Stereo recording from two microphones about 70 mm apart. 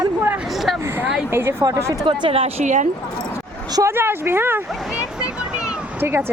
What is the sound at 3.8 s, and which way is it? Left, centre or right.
Speech, right.